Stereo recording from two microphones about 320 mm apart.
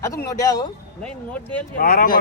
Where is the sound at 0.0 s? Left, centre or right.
Centre.